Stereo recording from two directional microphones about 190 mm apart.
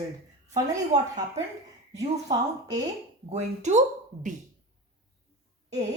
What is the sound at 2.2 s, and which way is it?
Speech, 20° right (ahead or behind).